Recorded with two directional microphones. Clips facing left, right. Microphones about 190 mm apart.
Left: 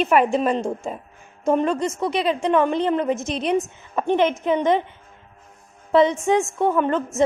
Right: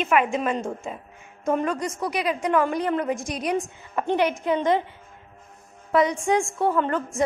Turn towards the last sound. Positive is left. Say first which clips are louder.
# left 3 dB
turn(degrees=20)  # may be behind; listen again after turning